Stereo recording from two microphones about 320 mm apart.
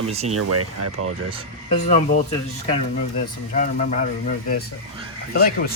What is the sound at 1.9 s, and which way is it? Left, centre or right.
Speech, left.